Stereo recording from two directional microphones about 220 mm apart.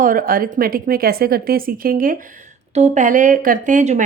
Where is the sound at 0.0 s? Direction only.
40° right (ahead or behind).